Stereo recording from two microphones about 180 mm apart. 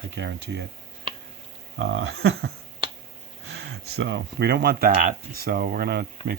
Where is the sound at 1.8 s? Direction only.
80° right.